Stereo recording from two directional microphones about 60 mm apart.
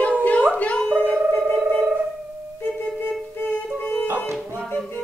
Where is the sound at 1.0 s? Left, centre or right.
Right.